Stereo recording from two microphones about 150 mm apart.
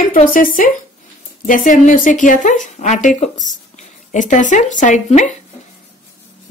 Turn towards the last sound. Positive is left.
turn(degrees=55)  # may be behind; listen again after turning